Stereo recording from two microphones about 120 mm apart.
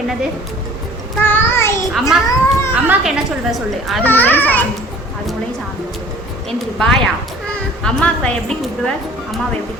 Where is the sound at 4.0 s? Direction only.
15° left (ahead or behind).